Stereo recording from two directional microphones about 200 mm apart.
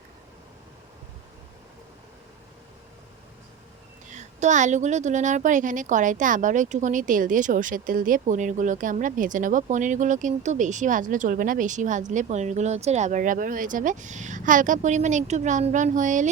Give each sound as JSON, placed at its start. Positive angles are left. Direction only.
{"t": 4.0, "sound": "a woman's voice", "side_deg": -35}